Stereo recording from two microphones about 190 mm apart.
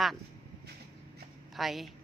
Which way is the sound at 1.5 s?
Centre (ahead or behind).